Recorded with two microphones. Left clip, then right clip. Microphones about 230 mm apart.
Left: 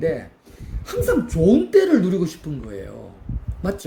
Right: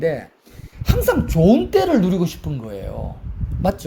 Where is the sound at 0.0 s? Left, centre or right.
Right.